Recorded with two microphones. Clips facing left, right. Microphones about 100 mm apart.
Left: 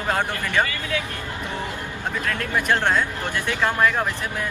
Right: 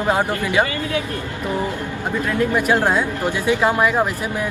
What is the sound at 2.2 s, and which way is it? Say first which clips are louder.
Speech: right 5 dB; 10° right (ahead or behind).